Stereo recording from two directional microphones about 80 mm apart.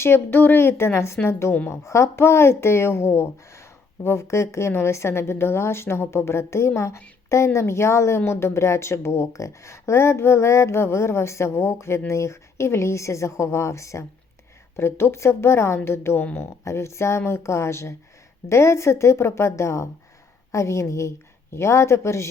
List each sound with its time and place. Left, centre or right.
0.0 s speech: left
16.6 s speech: left